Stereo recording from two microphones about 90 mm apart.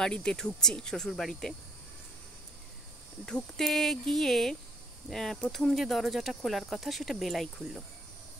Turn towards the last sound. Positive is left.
turn(degrees=0)  # may be behind; listen again after turning